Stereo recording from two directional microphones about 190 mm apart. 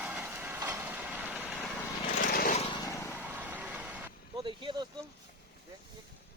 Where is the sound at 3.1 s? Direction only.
10° right (ahead or behind).